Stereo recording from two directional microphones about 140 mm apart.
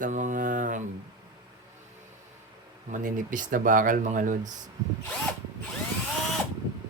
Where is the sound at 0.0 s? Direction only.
65° right (ahead or behind).